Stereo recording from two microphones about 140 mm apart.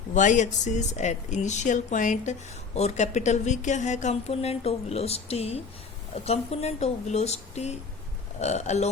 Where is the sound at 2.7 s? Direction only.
50° left (ahead or behind).